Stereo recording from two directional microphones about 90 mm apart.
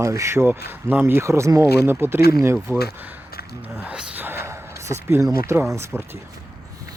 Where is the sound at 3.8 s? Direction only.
15° right (ahead or behind); by 5.2 s 30° right (ahead or behind).